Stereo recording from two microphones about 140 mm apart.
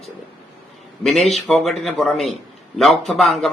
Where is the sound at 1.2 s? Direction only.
55° left (ahead or behind).